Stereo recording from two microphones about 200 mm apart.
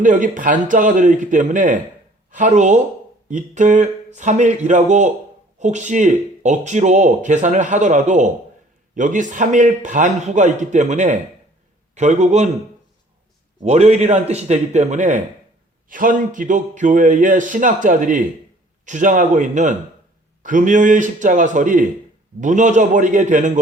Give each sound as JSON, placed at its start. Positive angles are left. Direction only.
{"t": 0.0, "sound": "speech", "side_deg": -40}
{"t": 13.6, "sound": "speech", "side_deg": -35}